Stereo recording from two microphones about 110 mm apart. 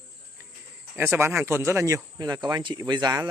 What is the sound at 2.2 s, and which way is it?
Speech, 40° right (ahead or behind).